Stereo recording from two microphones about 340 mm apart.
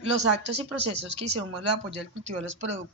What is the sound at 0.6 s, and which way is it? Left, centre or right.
Speech, right.